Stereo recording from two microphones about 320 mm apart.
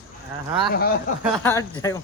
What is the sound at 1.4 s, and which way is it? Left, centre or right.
Speech, centre.